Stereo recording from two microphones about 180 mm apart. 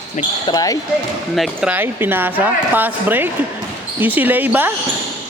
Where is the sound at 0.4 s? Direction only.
20° left (ahead or behind).